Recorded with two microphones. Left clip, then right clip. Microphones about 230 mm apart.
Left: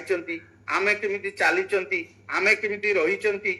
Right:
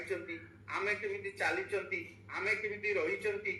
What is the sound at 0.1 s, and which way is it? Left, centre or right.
A man's voice, left.